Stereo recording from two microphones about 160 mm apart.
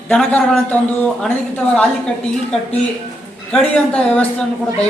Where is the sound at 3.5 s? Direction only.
5° left (ahead or behind).